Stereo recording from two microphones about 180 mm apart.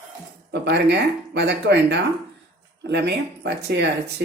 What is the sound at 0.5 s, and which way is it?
Speech, 70° right (ahead or behind).